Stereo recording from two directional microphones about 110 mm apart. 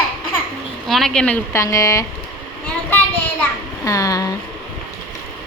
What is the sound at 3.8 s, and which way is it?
Speech, 30° left (ahead or behind).